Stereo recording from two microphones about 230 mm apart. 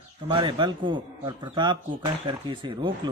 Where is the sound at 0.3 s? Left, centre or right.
Right.